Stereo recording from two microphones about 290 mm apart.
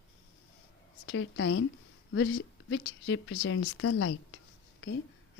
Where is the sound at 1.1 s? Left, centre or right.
Left.